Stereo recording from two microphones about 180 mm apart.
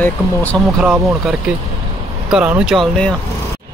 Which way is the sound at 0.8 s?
5° right (ahead or behind).